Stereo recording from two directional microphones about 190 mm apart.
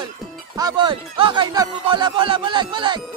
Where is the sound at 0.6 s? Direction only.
20° right (ahead or behind).